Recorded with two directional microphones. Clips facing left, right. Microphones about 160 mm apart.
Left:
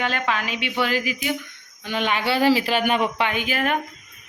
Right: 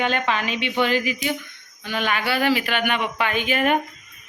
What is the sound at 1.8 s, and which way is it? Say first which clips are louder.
Speech: left 1 dB; 20° left (ahead or behind).